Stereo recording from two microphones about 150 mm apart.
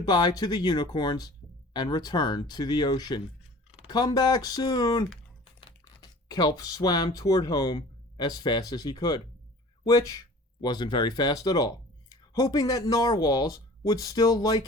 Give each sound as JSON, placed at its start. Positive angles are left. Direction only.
{"t": 0.0, "sound": "speech", "side_deg": 30}